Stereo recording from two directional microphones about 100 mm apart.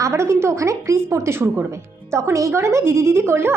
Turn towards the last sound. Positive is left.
turn(degrees=-25)  # may be behind; listen again after turning